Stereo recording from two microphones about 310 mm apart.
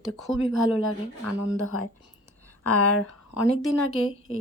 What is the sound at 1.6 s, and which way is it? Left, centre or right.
Speech, left.